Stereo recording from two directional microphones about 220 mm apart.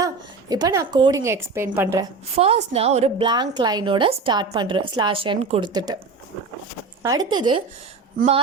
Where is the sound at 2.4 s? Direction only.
25° right (ahead or behind).